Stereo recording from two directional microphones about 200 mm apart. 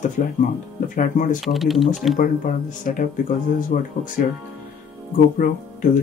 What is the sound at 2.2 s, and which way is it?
Speech, 45° left (ahead or behind).